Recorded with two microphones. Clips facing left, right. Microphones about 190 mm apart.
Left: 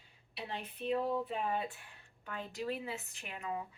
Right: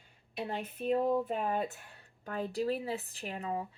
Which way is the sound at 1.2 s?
45° right (ahead or behind).